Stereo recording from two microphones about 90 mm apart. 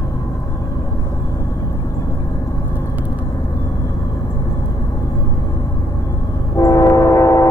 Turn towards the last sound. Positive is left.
turn(degrees=40)  # may be behind; listen again after turning